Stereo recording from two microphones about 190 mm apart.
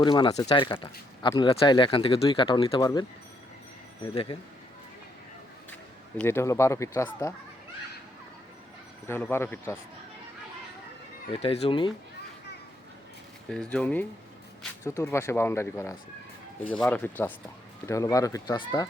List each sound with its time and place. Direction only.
0.0 s speech: 25° left (ahead or behind)
6.1 s speech: 10° left (ahead or behind)
9.0 s speech: 10° left (ahead or behind)
11.3 s speech: 30° left (ahead or behind)
13.5 s speech: 5° left (ahead or behind); by 18.9 s 20° left (ahead or behind)